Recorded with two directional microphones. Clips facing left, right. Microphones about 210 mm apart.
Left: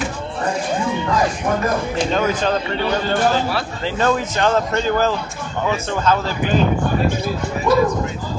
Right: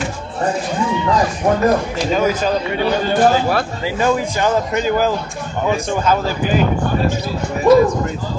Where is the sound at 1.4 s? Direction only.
35° right (ahead or behind).